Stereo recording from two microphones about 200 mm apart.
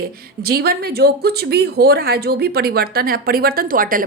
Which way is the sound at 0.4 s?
50° right (ahead or behind).